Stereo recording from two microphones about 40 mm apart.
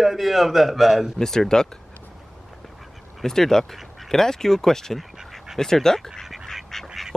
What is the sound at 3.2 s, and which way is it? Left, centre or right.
Speech, centre.